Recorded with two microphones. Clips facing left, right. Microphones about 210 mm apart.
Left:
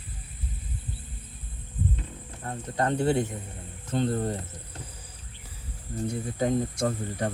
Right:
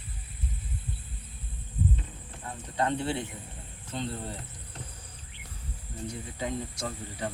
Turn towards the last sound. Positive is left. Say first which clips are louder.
# left 7 dB
turn(degrees=50)  # may be behind; listen again after turning